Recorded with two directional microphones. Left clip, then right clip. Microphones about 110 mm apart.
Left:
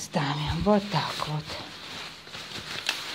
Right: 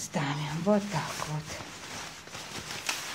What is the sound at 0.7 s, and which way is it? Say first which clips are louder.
Speech: left 4 dB; 60° left (ahead or behind).